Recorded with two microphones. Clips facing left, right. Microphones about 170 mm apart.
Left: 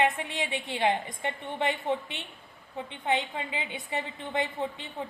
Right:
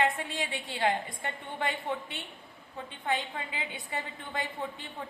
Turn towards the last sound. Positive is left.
turn(degrees=20)  # may be behind; listen again after turning